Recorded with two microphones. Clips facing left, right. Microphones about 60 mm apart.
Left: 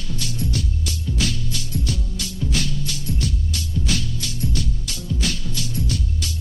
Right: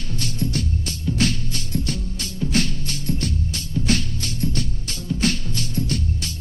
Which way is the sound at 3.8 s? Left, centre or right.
Right.